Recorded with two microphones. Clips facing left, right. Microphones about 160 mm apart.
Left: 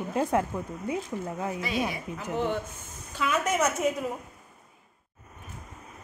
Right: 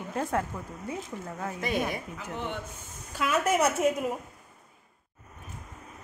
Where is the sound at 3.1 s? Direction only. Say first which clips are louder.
Right 1 dB; 5° right (ahead or behind).